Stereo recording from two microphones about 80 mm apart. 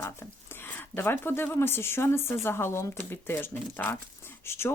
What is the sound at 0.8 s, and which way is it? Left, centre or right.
Speech, left.